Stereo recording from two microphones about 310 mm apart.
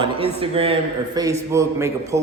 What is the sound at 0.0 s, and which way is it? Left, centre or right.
A man's voice, centre.